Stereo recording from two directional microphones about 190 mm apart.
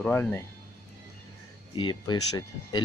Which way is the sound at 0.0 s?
10° left (ahead or behind).